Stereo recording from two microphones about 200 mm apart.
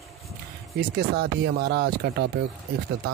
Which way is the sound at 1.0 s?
50° right (ahead or behind).